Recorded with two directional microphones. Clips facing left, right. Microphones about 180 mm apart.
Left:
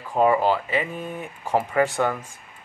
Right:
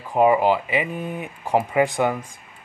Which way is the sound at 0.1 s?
15° right (ahead or behind).